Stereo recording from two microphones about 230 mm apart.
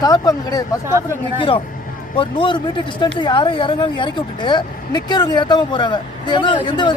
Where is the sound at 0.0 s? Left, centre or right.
Centre.